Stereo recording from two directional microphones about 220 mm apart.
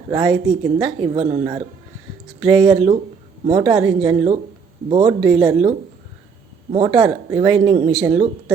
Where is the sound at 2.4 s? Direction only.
20° right (ahead or behind).